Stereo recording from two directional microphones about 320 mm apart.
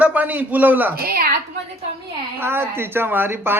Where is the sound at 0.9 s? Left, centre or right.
Right.